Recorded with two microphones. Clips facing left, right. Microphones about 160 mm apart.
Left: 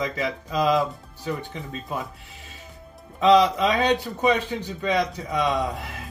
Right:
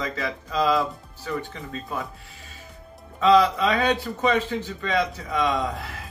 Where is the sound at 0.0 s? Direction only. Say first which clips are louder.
Left 2 dB; 15° left (ahead or behind).